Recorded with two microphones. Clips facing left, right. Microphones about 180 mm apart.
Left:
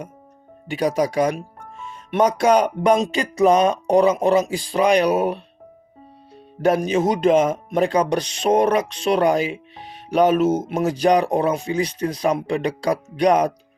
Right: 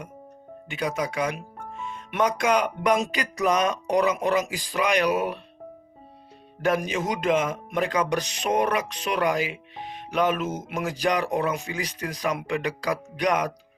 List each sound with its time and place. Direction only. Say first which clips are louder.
0.7 s speech: left 8 dB; 35° left (ahead or behind)
2.4 s a sound: left 6 dB; 35° left (ahead or behind)
6.7 s speech: left 7 dB; 30° left (ahead or behind)